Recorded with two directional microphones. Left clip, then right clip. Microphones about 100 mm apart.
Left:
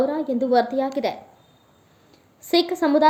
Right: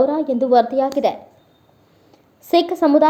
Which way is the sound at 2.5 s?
30° right (ahead or behind).